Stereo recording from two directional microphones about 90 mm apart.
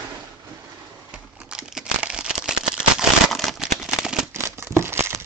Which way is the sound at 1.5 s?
10° right (ahead or behind).